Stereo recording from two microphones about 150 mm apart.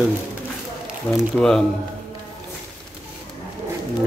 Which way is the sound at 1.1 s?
5° left (ahead or behind).